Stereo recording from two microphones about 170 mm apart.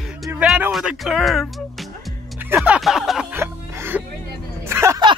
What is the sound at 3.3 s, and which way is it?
Music, 15° right (ahead or behind).